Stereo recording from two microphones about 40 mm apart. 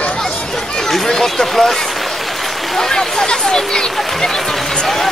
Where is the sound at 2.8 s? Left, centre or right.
Centre.